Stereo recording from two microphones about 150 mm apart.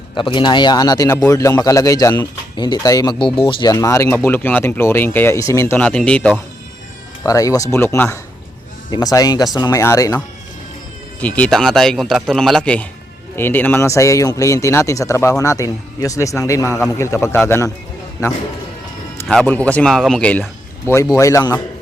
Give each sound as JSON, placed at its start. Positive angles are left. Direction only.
{"t": 0.1, "sound": "a man's voice", "side_deg": 30}
{"t": 7.3, "sound": "a man's voice", "side_deg": 20}
{"t": 11.2, "sound": "a man's voice", "side_deg": 10}
{"t": 19.3, "sound": "speech", "side_deg": 10}